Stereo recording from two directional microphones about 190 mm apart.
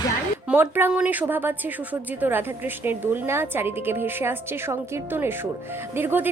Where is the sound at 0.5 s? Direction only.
10° right (ahead or behind).